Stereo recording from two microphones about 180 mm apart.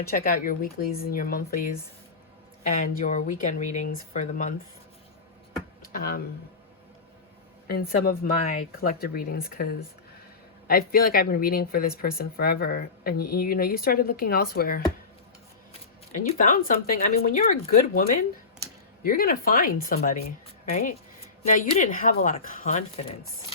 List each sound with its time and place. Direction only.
0.2 s speech: 50° left (ahead or behind)
2.6 s speech: 45° left (ahead or behind)
5.8 s speech: 50° left (ahead or behind)
7.7 s speech: 55° left (ahead or behind)
16.1 s speech: 50° left (ahead or behind)